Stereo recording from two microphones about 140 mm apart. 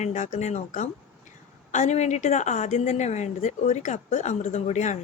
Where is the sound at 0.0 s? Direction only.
60° left (ahead or behind).